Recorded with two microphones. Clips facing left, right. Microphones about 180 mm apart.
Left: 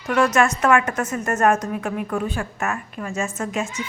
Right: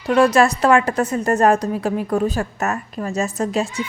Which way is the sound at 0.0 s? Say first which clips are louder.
Right 4 dB; 30° right (ahead or behind).